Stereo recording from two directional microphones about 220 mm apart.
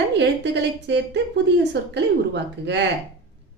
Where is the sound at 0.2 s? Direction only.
50° right (ahead or behind).